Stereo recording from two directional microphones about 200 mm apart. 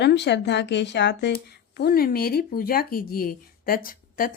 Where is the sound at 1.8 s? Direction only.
50° left (ahead or behind).